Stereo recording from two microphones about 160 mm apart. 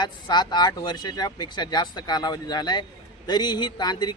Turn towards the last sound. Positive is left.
turn(degrees=25)  # may be behind; listen again after turning